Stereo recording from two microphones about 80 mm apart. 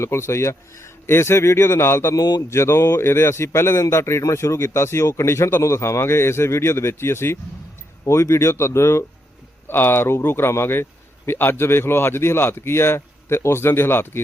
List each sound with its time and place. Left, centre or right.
0.0 s a man's voice: left
2.1 s speech: left
2.5 s a man's voice: left